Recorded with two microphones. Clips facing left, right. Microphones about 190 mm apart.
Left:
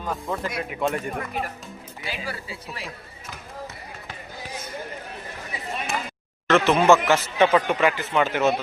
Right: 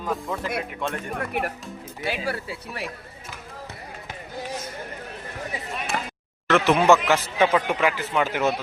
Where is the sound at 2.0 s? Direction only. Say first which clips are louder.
Right 5 dB; 60° right (ahead or behind).